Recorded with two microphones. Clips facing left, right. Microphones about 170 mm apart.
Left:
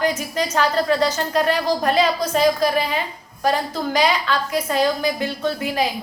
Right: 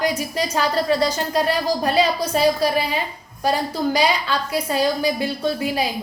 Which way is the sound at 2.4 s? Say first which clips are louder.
Even; 35° right (ahead or behind).